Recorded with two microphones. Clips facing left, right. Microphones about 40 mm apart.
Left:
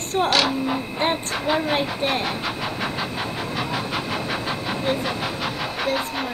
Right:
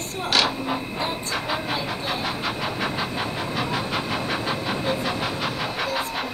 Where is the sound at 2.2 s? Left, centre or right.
Centre.